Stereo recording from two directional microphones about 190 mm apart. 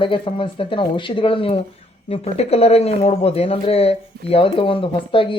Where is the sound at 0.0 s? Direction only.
25° left (ahead or behind).